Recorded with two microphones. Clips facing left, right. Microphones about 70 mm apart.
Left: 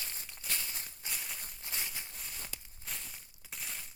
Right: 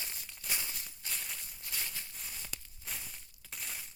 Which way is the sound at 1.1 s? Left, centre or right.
Centre.